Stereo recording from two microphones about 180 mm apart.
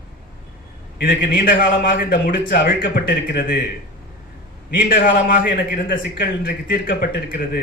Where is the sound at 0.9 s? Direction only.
50° left (ahead or behind).